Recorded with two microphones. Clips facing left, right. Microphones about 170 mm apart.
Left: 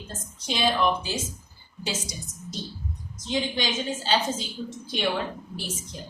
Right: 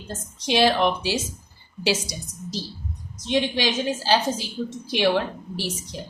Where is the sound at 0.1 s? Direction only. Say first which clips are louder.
Right 9 dB; 75° right (ahead or behind).